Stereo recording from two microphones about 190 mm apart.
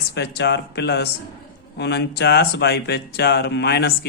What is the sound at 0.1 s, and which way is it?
Speech, 60° left (ahead or behind).